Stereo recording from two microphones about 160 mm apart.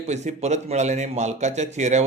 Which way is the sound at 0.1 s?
45° right (ahead or behind).